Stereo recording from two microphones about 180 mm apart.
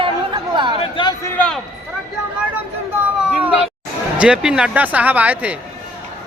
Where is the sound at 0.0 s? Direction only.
25° right (ahead or behind).